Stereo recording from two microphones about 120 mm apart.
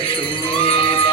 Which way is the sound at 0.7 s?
55° left (ahead or behind).